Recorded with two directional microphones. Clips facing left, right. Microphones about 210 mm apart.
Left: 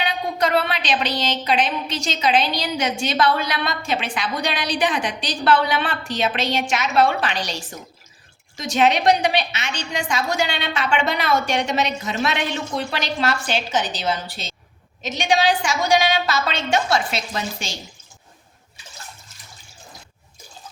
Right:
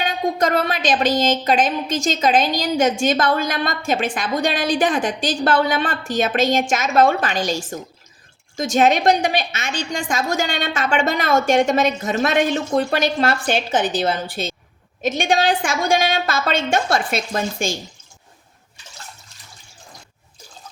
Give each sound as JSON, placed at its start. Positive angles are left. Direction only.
{"t": 0.0, "sound": "a woman's voice", "side_deg": -45}